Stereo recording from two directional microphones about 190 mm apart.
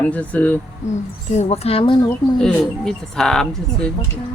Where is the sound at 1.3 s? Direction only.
35° left (ahead or behind).